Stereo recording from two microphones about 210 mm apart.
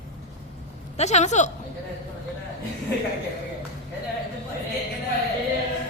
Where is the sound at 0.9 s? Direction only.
30° left (ahead or behind).